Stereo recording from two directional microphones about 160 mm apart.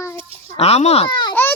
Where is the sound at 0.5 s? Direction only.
40° left (ahead or behind).